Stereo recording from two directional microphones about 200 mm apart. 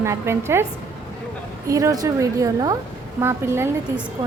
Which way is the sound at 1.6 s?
15° right (ahead or behind).